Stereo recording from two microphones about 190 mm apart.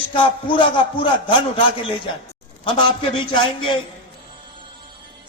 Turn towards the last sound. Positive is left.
turn(degrees=25)  # may be behind; listen again after turning